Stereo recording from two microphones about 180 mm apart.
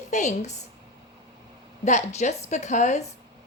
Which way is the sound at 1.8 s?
40° left (ahead or behind).